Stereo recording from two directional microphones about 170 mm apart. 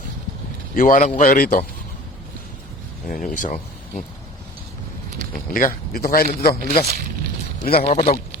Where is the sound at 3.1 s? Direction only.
50° left (ahead or behind).